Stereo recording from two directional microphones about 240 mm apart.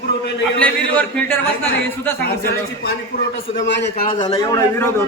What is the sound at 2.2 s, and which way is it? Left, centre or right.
A man's voice, left.